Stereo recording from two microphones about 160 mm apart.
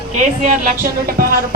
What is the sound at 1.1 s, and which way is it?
Speech, 65° right (ahead or behind).